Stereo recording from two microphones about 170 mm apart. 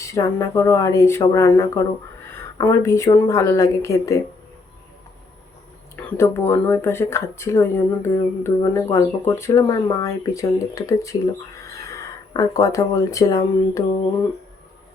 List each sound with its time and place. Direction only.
0.0 s speech: 20° left (ahead or behind)
6.0 s speech: 15° left (ahead or behind)